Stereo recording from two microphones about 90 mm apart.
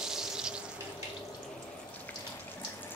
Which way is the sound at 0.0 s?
5° right (ahead or behind).